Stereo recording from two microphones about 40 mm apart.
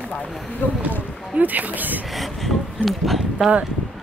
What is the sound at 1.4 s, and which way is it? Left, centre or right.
Speech, right.